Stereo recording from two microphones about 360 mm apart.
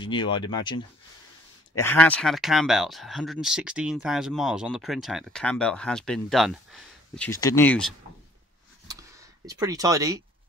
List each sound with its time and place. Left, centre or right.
0.0 s speech: centre
9.5 s speech: centre